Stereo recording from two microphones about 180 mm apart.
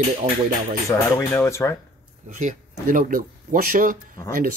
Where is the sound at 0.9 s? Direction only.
15° left (ahead or behind).